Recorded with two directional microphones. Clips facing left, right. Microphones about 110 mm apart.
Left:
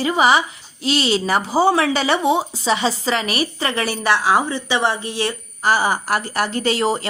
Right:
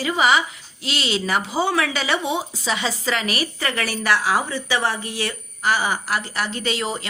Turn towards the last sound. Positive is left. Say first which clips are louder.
# left 6 dB
turn(degrees=40)  # may be behind; listen again after turning